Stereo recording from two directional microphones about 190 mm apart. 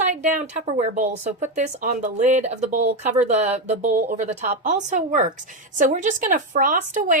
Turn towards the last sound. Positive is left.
turn(degrees=-40)  # may be behind; listen again after turning